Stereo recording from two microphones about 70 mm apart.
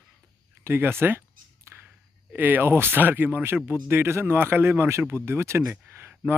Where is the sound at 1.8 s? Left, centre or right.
Right.